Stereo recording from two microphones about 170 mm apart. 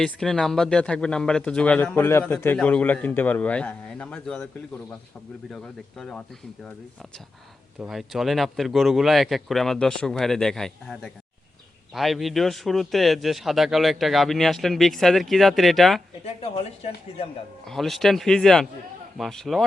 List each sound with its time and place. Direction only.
0.0 s speech: 5° left (ahead or behind)
5.5 s a man's voice: 5° left (ahead or behind)
7.8 s a man's voice: centre (ahead or behind)
16.2 s speech: 35° left (ahead or behind)
17.7 s a man's voice: centre (ahead or behind)